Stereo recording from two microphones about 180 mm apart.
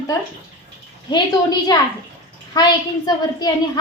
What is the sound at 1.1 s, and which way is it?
Speech, 25° left (ahead or behind).